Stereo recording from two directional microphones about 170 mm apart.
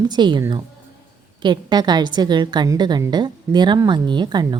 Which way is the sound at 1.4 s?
25° right (ahead or behind).